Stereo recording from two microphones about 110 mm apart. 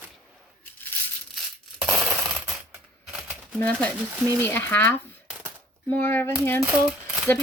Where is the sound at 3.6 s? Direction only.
10° left (ahead or behind).